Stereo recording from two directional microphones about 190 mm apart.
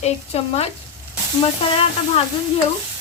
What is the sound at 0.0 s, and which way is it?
Speech, 35° left (ahead or behind).